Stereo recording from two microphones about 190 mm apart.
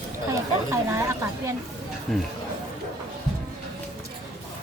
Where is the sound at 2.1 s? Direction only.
Centre (ahead or behind).